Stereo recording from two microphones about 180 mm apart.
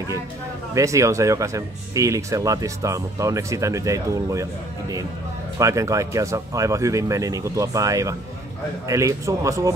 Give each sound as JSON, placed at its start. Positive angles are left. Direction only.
{"t": 0.7, "sound": "speech", "side_deg": -15}